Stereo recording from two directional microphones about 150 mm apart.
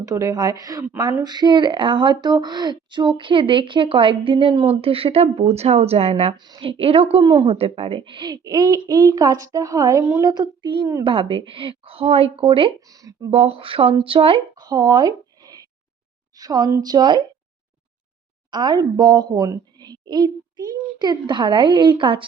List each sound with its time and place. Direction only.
0.0 s a woman's voice: 20° right (ahead or behind); by 6.3 s 40° right (ahead or behind)
6.3 s a woman's voice: 30° right (ahead or behind)
7.3 s a woman's voice: 30° right (ahead or behind)
7.5 s a woman's voice: 40° right (ahead or behind)
12.8 s a woman's voice: 25° right (ahead or behind)
13.3 s a woman's voice: 40° right (ahead or behind)
18.5 s a woman's voice: 25° right (ahead or behind)